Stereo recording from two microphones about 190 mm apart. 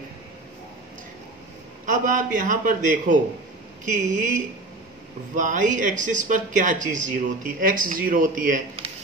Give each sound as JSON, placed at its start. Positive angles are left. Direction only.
{"t": 1.9, "sound": "speech", "side_deg": -45}